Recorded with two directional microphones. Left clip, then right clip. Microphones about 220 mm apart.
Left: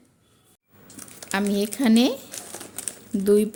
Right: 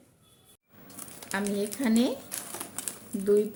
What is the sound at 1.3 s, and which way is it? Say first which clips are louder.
Speech: left 6 dB; 50° left (ahead or behind).